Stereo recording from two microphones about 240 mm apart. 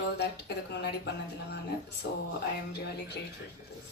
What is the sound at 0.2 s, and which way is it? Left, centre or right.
Speech, left.